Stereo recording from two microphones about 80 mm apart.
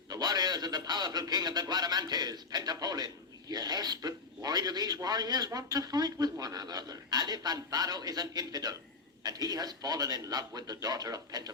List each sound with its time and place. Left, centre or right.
0.1 s a man's voice: right